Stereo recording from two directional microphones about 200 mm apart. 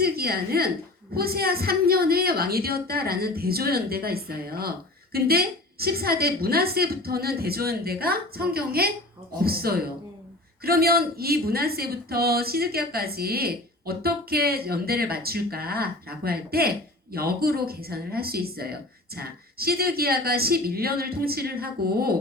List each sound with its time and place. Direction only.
0.0 s a woman's voice: 50° right (ahead or behind)